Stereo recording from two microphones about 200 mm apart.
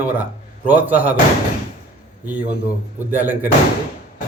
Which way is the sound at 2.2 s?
5° right (ahead or behind).